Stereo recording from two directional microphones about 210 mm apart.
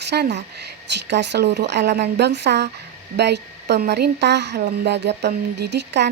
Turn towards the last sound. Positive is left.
turn(degrees=-55)  # may be behind; listen again after turning